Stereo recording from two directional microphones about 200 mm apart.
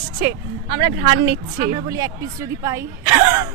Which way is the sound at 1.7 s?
15° right (ahead or behind).